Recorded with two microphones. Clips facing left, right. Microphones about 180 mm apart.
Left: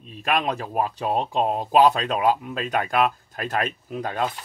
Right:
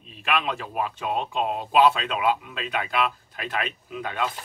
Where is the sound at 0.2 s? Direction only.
40° left (ahead or behind).